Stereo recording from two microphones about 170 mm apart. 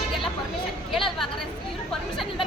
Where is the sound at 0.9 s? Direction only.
Centre (ahead or behind).